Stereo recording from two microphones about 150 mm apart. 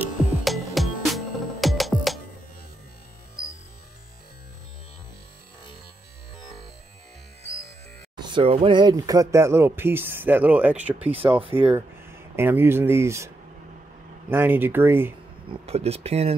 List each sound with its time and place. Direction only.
0.0 s music: 10° right (ahead or behind)
8.2 s speech: 35° right (ahead or behind); by 13.3 s 20° right (ahead or behind)
14.3 s speech: 15° right (ahead or behind)
15.6 s speech: 45° right (ahead or behind)